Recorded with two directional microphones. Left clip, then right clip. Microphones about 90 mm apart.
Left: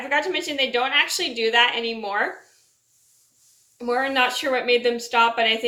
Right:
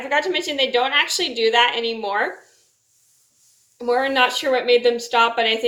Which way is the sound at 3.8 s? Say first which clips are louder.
Right 3 dB; 15° right (ahead or behind).